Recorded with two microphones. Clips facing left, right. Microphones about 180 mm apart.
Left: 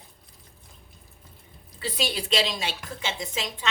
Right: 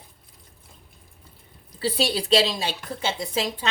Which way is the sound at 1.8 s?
30° right (ahead or behind).